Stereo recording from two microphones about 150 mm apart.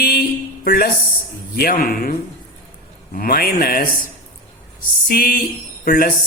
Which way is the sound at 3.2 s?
80° left.